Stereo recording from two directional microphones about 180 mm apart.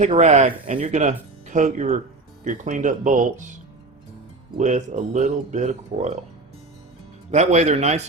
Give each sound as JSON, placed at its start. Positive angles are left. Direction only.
{"t": 0.0, "sound": "speech", "side_deg": -40}
{"t": 4.5, "sound": "speech", "side_deg": -45}
{"t": 7.3, "sound": "speech", "side_deg": -40}